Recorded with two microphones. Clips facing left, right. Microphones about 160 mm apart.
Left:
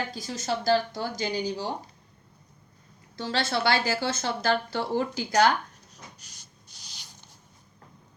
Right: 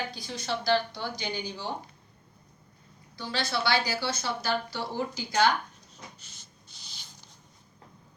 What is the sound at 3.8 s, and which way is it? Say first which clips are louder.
A woman's voice: left 3 dB; 50° left (ahead or behind).